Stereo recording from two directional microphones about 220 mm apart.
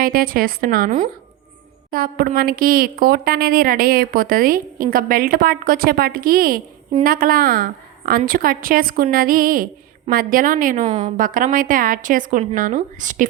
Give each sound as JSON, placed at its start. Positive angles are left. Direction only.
{"t": 0.0, "sound": "a woman's voice", "side_deg": -40}